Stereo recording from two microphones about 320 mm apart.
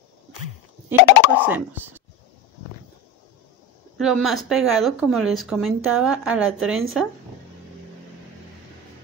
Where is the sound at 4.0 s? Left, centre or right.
Centre.